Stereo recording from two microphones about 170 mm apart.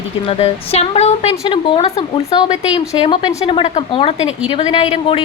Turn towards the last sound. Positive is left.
turn(degrees=35)  # may be behind; listen again after turning